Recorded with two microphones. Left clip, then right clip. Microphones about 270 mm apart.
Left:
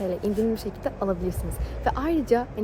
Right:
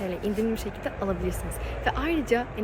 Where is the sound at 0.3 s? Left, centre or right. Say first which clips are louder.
Even; centre.